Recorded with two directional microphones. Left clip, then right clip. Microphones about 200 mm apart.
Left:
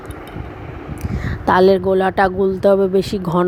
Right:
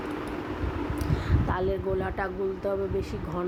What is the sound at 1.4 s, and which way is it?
Speech, 50° left (ahead or behind).